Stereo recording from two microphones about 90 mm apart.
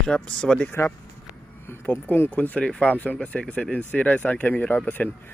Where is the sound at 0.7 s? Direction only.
25° left (ahead or behind).